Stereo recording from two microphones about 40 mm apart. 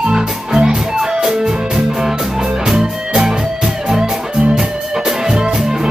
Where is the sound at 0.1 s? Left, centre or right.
Centre.